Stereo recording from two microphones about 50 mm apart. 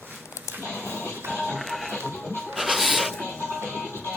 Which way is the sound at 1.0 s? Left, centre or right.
Right.